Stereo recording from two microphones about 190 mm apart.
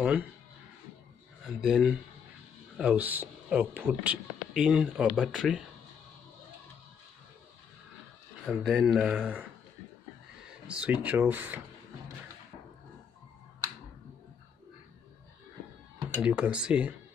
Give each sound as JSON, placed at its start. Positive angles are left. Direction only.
{"t": 0.0, "sound": "speech", "side_deg": -10}
{"t": 1.6, "sound": "speech", "side_deg": -5}
{"t": 8.5, "sound": "speech", "side_deg": 0}
{"t": 10.7, "sound": "speech", "side_deg": -5}
{"t": 16.2, "sound": "speech", "side_deg": -5}